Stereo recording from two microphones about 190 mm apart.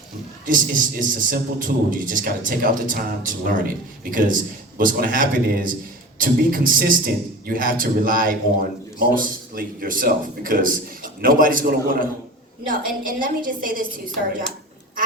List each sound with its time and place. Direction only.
0.4 s a man's voice: 45° right (ahead or behind)
4.8 s a man's voice: 45° right (ahead or behind)